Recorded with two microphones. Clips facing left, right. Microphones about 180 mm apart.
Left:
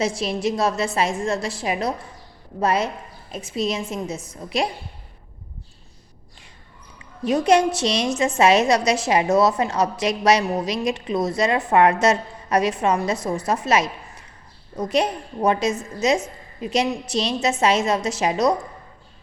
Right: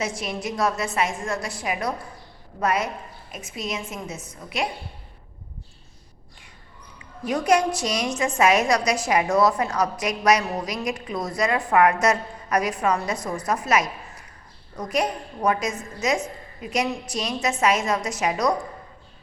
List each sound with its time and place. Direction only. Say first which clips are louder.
0.0 s a woman's voice: left 6 dB; 30° left (ahead or behind)
7.3 s a woman's voice: left 3 dB; 25° left (ahead or behind)